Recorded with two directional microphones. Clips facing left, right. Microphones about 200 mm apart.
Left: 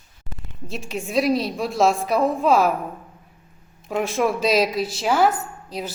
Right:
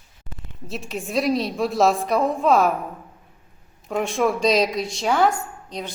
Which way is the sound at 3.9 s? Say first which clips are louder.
Even; centre (ahead or behind).